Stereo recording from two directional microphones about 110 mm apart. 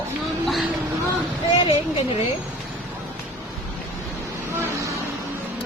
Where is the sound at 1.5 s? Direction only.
60° left (ahead or behind).